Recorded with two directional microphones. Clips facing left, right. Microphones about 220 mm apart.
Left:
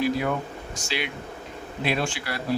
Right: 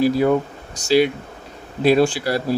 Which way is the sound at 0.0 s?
35° right (ahead or behind).